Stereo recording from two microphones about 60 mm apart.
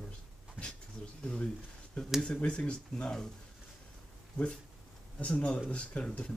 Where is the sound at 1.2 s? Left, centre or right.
Centre.